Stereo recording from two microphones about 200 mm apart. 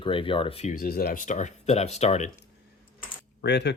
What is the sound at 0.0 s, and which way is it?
Speech, 25° left (ahead or behind).